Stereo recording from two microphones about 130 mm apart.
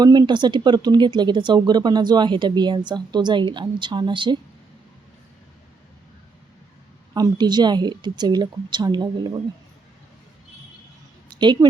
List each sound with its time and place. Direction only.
0.0 s speech: 35° right (ahead or behind)
7.1 s speech: 30° right (ahead or behind)
11.3 s a woman's voice: 35° right (ahead or behind)